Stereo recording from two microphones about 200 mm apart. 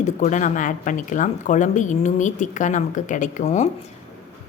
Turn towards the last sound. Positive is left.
turn(degrees=35)  # may be behind; listen again after turning